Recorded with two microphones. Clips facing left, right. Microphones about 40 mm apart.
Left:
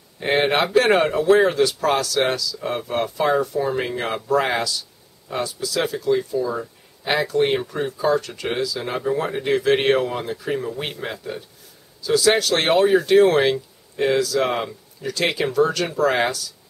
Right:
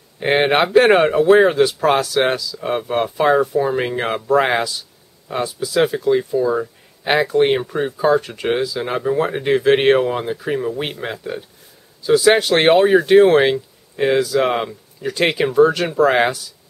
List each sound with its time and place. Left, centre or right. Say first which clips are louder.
0.2 s speech: right 4 dB; right